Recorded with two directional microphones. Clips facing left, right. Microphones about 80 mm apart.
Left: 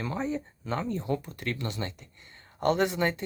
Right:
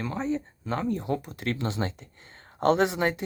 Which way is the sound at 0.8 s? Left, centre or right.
Centre.